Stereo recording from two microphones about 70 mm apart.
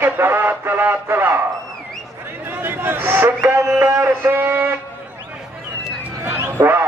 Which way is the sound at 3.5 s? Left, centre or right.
Right.